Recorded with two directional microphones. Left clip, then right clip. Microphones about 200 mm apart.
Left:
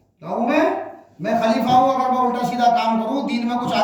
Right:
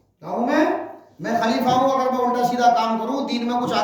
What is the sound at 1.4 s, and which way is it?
Speech, 25° right (ahead or behind).